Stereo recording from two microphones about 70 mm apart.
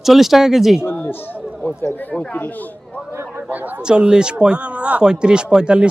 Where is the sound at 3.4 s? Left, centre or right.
Right.